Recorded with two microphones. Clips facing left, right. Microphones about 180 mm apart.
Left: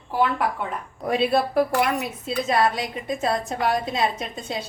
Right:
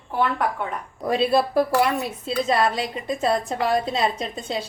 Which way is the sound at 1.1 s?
30° right (ahead or behind).